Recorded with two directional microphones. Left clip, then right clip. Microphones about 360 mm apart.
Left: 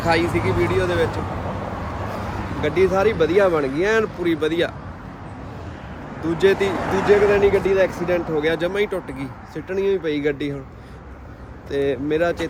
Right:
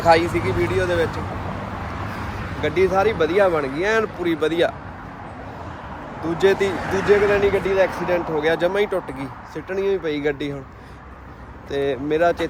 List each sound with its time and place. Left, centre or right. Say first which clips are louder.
0.0 s speech: right 3 dB; centre
2.6 s speech: even; centre
6.2 s speech: even; centre
6.7 s speech: left 2 dB; centre
7.3 s speech: left 2 dB; centre
11.7 s speech: left 1 dB; centre